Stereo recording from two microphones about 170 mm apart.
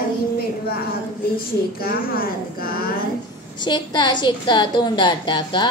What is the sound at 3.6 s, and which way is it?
A woman's voice, 25° left (ahead or behind).